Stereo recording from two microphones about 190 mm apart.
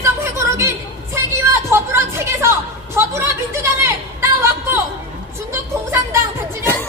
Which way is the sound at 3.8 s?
15° right (ahead or behind).